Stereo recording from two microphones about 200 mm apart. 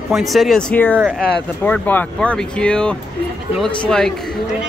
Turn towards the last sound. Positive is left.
turn(degrees=5)  # may be behind; listen again after turning